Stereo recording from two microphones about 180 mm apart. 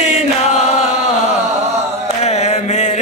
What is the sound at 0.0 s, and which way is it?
Chant, 40° left (ahead or behind).